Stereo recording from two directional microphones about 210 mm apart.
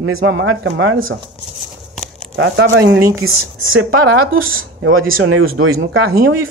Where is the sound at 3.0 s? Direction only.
15° right (ahead or behind).